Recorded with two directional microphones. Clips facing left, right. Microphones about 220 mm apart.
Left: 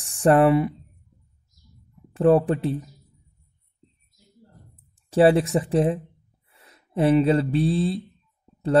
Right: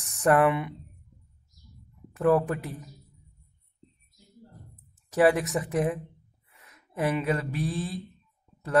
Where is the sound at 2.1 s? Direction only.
30° left (ahead or behind).